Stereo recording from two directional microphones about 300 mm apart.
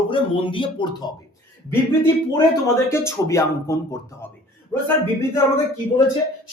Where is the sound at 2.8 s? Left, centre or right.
Centre.